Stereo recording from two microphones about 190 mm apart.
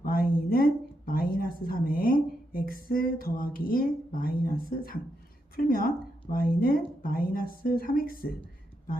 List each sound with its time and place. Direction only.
0.0 s speech: 50° left (ahead or behind)